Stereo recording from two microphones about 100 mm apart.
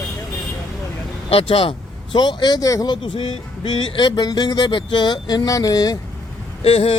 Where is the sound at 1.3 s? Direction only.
70° left (ahead or behind); by 2.9 s 35° left (ahead or behind).